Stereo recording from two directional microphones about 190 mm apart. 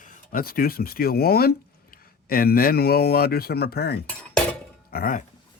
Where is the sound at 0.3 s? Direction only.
50° left (ahead or behind).